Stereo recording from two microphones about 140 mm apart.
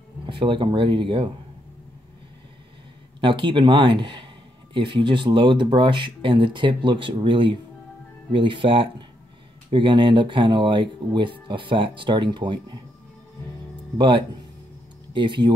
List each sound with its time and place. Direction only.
0.3 s speech: 35° right (ahead or behind)
3.2 s speech: 35° right (ahead or behind)
13.9 s speech: 35° right (ahead or behind)